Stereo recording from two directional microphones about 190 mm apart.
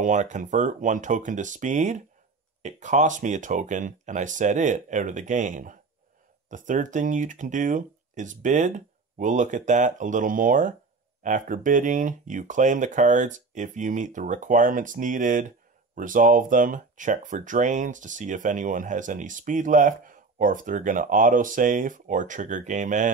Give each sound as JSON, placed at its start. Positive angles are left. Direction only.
{"t": 0.0, "sound": "speech", "side_deg": -40}